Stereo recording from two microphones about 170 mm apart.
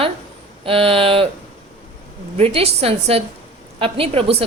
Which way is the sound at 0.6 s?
35° right (ahead or behind).